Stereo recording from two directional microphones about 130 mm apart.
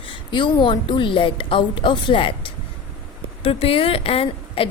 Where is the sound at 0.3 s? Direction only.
35° left (ahead or behind).